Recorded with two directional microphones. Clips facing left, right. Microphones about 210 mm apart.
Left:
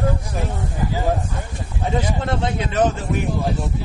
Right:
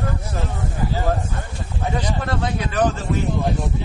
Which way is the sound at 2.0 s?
25° left (ahead or behind).